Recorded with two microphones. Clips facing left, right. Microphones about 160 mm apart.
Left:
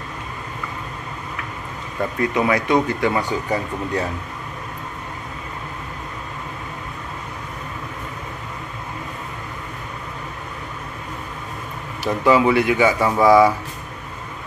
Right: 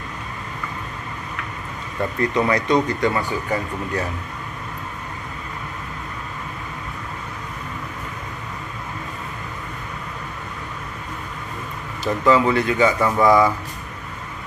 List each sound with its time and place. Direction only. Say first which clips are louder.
2.1 s speech: even; 5° left (ahead or behind)
12.0 s speech: left 1 dB; 10° left (ahead or behind)